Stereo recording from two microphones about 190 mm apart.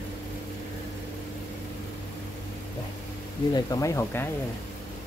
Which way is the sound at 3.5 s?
15° left (ahead or behind).